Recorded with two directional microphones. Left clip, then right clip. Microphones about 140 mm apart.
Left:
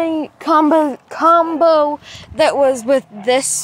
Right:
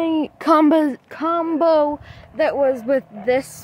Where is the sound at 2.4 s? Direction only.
15° left (ahead or behind).